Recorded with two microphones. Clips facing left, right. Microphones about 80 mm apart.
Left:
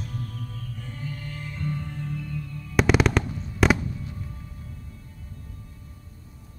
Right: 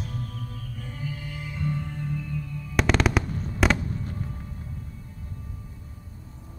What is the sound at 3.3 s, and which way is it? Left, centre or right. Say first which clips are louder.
Fireworks: right 3 dB; right.